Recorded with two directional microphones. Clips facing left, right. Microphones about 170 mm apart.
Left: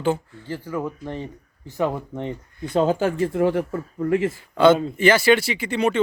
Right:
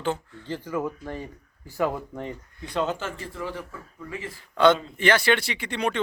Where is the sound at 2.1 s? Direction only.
20° left (ahead or behind).